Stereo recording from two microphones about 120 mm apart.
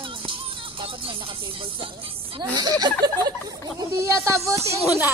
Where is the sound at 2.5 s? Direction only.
35° right (ahead or behind).